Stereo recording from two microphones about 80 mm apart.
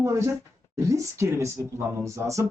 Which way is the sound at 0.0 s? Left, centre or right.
Right.